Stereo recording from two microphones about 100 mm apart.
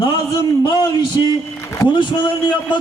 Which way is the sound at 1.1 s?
45° left (ahead or behind).